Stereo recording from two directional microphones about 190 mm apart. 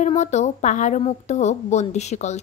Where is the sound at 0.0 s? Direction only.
35° left (ahead or behind).